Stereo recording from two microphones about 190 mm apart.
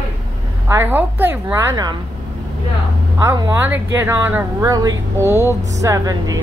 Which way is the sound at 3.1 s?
15° right (ahead or behind).